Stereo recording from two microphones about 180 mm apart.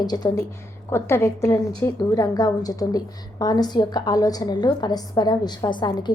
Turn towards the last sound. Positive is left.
turn(degrees=25)  # may be behind; listen again after turning